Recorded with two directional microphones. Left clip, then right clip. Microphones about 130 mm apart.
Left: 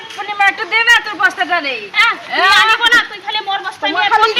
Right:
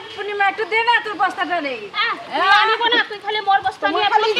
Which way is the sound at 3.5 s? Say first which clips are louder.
Right 1 dB; 25° right (ahead or behind).